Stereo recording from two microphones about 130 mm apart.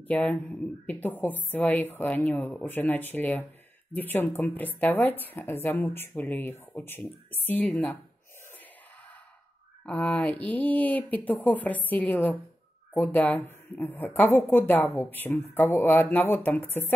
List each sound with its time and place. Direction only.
0.1 s a woman's voice: 10° left (ahead or behind)
9.8 s a woman's voice: 10° left (ahead or behind)